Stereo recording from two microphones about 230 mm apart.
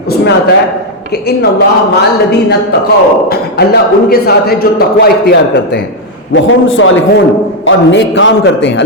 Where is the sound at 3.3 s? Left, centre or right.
Left.